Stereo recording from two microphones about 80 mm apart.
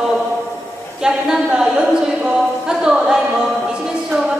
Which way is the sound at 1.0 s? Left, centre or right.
Centre.